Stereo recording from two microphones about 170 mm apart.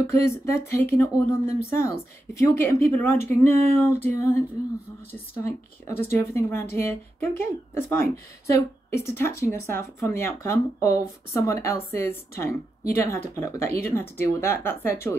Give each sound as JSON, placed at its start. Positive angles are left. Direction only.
{"t": 0.1, "sound": "speech", "side_deg": 15}
{"t": 5.1, "sound": "speech", "side_deg": 15}